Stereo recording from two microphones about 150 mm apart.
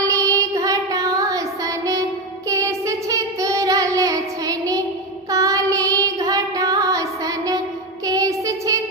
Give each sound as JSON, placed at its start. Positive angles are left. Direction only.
{"t": 0.1, "sound": "child singing", "side_deg": -20}